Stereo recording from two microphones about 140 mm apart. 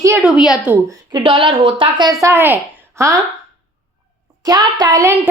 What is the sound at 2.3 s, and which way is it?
Speech, 15° right (ahead or behind).